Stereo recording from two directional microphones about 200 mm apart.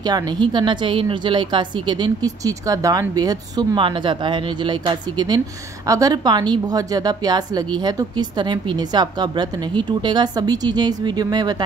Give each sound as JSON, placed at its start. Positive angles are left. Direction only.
{"t": 0.0, "sound": "a woman's voice", "side_deg": -20}